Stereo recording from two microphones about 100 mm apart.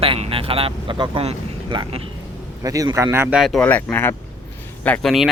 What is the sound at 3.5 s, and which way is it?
Speech, 15° left (ahead or behind).